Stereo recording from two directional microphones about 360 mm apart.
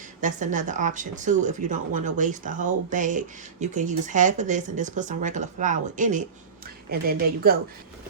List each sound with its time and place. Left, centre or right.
0.2 s speech: right